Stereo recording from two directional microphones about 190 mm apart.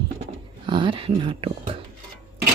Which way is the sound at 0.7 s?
25° right (ahead or behind).